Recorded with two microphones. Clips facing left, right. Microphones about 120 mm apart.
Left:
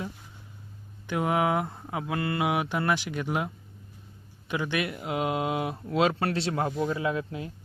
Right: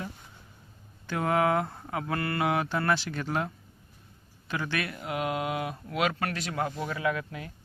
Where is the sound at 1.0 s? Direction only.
15° left (ahead or behind).